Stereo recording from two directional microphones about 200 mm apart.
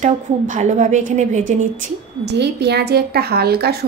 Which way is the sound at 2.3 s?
55° right (ahead or behind).